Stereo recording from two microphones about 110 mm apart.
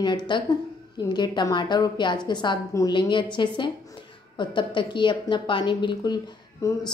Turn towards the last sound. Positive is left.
turn(degrees=30)  # may be behind; listen again after turning